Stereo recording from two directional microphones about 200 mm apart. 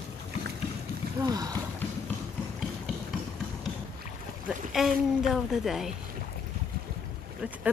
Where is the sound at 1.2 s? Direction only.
20° right (ahead or behind).